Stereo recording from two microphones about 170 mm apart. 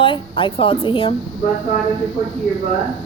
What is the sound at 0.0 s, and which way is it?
A woman's voice, 30° left (ahead or behind).